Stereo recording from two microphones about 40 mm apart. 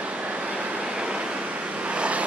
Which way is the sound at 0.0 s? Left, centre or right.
Right.